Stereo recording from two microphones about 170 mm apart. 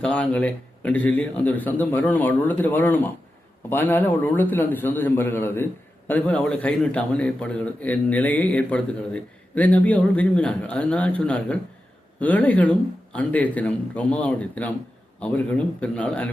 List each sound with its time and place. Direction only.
0.0 s a man's voice: 5° left (ahead or behind)